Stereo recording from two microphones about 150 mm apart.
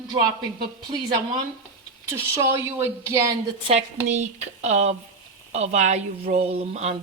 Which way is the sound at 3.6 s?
45° right (ahead or behind).